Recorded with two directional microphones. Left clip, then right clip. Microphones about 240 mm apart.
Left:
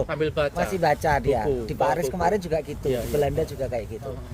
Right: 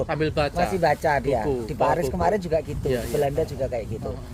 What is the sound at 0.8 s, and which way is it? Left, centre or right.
Speech, left.